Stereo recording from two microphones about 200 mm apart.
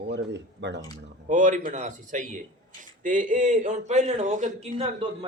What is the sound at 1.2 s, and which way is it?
A man's voice, 40° right (ahead or behind).